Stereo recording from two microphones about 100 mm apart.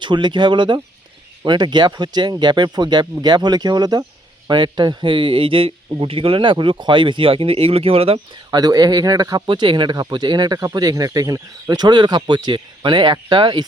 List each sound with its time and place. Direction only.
0.0 s speech: 50° right (ahead or behind); by 8.2 s 80° right
8.4 s speech: 40° right (ahead or behind)
9.5 s speech: 55° right (ahead or behind); by 11.4 s 35° right (ahead or behind)
11.7 s speech: 45° right (ahead or behind)